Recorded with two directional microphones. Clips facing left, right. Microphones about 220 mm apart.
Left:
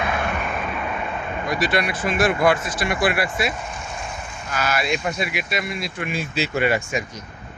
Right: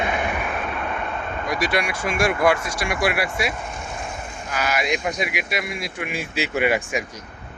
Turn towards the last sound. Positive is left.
turn(degrees=-15)  # may be behind; listen again after turning